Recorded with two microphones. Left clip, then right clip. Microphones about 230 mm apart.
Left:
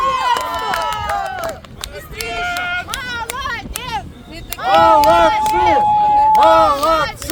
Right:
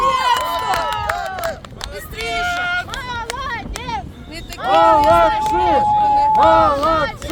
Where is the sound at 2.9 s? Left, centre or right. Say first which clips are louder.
Left 2 dB; left.